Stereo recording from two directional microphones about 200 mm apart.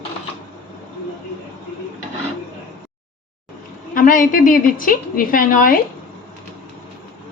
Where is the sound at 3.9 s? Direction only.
45° left (ahead or behind).